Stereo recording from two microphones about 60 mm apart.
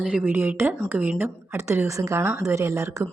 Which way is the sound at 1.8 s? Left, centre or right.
Right.